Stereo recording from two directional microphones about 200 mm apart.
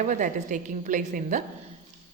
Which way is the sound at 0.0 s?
40° right (ahead or behind).